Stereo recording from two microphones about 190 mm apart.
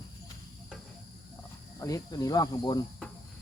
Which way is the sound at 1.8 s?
20° left (ahead or behind).